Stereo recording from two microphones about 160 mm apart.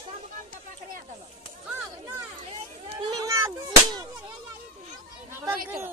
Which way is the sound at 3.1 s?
20° right (ahead or behind).